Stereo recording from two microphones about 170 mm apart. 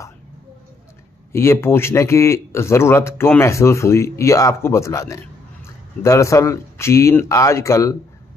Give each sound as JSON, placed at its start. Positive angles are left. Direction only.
{"t": 1.3, "sound": "speech", "side_deg": 15}